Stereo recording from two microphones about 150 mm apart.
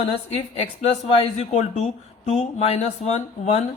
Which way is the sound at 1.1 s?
50° left (ahead or behind).